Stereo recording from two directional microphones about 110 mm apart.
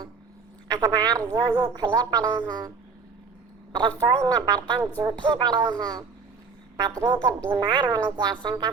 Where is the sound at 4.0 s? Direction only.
35° right (ahead or behind).